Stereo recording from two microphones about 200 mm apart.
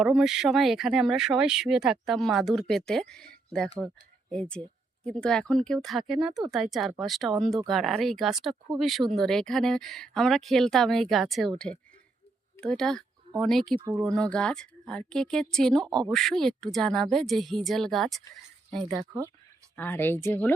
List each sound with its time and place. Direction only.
0.0 s speech: centre (ahead or behind)
15.9 s speech: 20° right (ahead or behind)
16.1 s speech: centre (ahead or behind)
18.9 s speech: 20° right (ahead or behind)
19.7 s speech: 10° left (ahead or behind)